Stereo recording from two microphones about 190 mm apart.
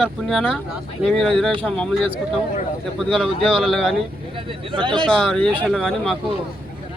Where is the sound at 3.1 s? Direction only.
5° right (ahead or behind).